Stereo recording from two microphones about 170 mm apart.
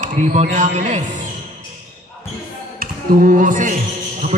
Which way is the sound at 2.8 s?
55° right (ahead or behind).